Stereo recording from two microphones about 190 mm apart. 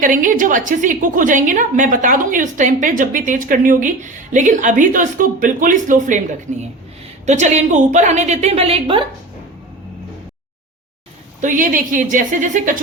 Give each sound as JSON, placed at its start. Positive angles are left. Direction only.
{"t": 0.0, "sound": "a woman's voice", "side_deg": -45}
{"t": 7.3, "sound": "a woman's voice", "side_deg": -40}
{"t": 11.3, "sound": "a woman's voice", "side_deg": -45}